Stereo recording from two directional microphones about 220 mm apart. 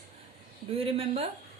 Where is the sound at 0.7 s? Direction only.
25° right (ahead or behind).